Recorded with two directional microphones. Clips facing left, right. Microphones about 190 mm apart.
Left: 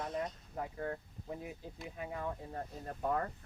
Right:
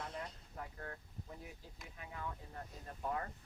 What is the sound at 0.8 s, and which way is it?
Speech, 45° left (ahead or behind).